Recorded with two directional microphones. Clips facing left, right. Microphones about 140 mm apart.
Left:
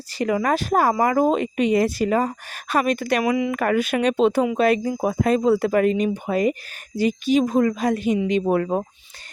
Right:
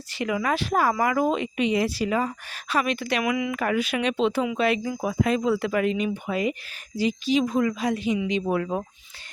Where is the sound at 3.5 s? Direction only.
50° left (ahead or behind).